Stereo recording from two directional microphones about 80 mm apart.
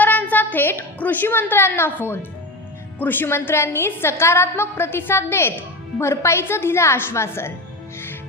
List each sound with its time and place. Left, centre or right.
0.0 s a woman's voice: left